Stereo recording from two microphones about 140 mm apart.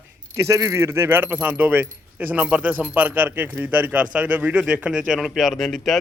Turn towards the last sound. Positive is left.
turn(degrees=0)  # may be behind; listen again after turning